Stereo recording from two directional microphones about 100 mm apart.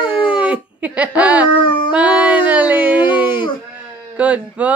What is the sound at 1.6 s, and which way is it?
Howl, 55° left (ahead or behind).